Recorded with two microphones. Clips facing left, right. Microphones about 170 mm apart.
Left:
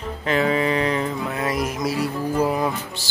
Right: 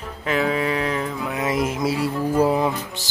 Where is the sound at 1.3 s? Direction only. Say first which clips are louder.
Right 5 dB; 20° right (ahead or behind).